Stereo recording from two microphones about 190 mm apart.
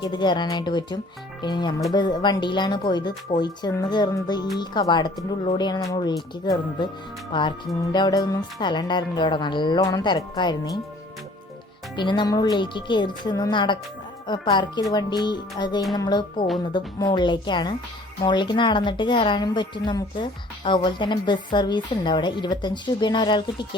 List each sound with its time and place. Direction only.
0.0 s a woman's voice: 25° left (ahead or behind)
7.9 s a woman's voice: 20° left (ahead or behind)
11.9 s a woman's voice: 25° left (ahead or behind)